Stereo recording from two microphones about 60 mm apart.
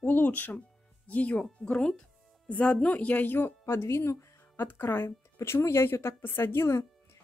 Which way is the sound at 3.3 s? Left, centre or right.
Left.